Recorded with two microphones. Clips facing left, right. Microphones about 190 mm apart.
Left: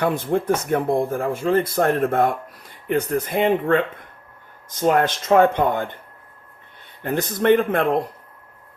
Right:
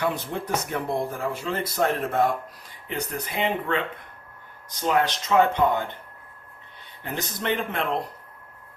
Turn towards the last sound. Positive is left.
turn(degrees=50)  # may be behind; listen again after turning